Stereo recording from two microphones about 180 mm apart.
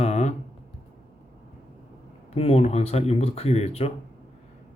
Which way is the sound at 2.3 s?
35° left (ahead or behind).